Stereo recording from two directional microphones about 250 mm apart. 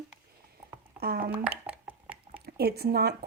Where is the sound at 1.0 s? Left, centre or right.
Right.